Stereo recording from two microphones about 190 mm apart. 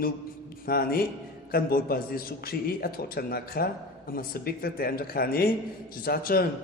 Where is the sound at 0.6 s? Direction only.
50° left (ahead or behind).